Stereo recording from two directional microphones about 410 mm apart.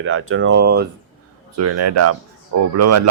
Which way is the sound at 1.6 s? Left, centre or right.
Right.